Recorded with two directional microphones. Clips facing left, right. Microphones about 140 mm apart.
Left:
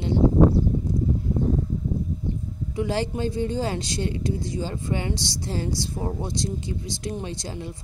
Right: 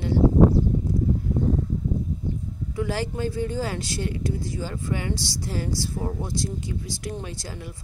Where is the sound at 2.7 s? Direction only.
25° left (ahead or behind).